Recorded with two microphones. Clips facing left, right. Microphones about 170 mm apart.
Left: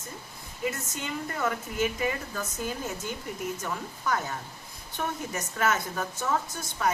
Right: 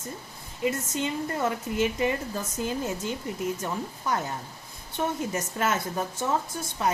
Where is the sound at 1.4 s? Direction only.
25° right (ahead or behind).